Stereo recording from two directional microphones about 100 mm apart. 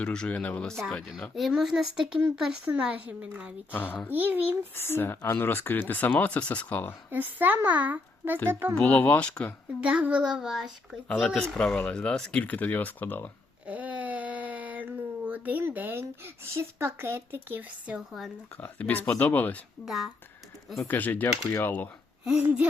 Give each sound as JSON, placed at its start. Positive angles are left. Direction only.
{"t": 0.0, "sound": "speech", "side_deg": 10}
{"t": 1.4, "sound": "speech", "side_deg": -5}
{"t": 3.7, "sound": "speech", "side_deg": 20}
{"t": 4.1, "sound": "a child's voice", "side_deg": -20}
{"t": 4.7, "sound": "speech", "side_deg": 25}
{"t": 7.1, "sound": "a child's voice", "side_deg": -20}
{"t": 8.8, "sound": "speech", "side_deg": 15}
{"t": 9.8, "sound": "speech", "side_deg": -10}
{"t": 13.7, "sound": "speech", "side_deg": -15}
{"t": 18.5, "sound": "speech", "side_deg": 20}
{"t": 19.8, "sound": "speech", "side_deg": 0}
{"t": 20.8, "sound": "speech", "side_deg": 20}
{"t": 22.2, "sound": "speech", "side_deg": -10}